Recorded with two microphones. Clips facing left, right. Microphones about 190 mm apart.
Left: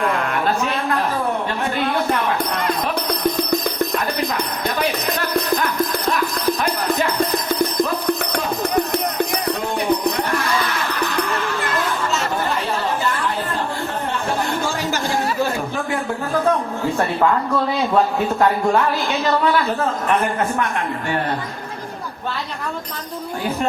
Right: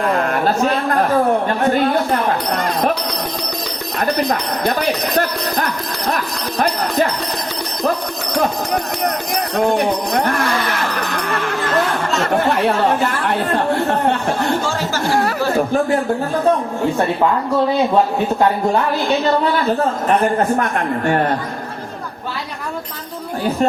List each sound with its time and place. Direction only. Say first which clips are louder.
0.1 s a sound: right 3 dB; 40° right (ahead or behind)
1.5 s speech: right 6 dB; 45° right (ahead or behind)
3.9 s music: right 3 dB; 45° right (ahead or behind)
7.2 s music: left 5 dB; 50° left (ahead or behind)
9.3 s music: right 5 dB; 55° right (ahead or behind)
12.3 s chatter: right 6 dB; 65° right (ahead or behind)
20.6 s speech: right 4 dB; 50° right (ahead or behind)